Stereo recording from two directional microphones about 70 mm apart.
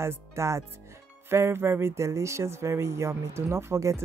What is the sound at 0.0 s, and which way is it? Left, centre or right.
Speech, right.